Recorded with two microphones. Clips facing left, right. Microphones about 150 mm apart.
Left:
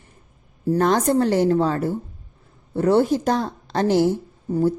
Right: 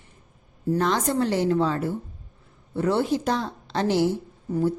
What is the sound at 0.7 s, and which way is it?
Speech, 50° left (ahead or behind).